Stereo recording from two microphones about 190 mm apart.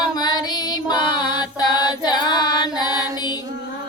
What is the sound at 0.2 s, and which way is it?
Music, 20° left (ahead or behind).